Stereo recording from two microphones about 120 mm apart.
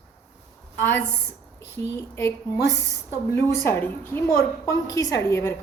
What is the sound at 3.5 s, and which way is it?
A woman's voice, 20° left (ahead or behind).